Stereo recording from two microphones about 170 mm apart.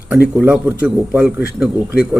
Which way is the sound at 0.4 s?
10° right (ahead or behind).